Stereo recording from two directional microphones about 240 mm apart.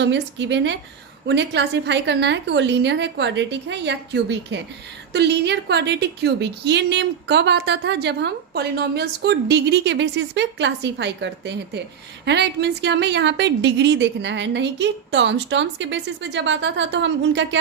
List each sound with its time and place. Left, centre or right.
0.0 s a woman's voice: right